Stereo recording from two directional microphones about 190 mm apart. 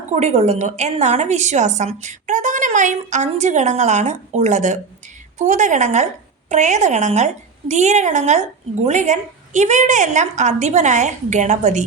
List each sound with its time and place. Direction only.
0.1 s a woman's voice: 35° right (ahead or behind)